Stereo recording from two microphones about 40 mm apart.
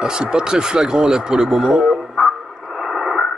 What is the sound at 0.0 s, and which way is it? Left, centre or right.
Speech, right.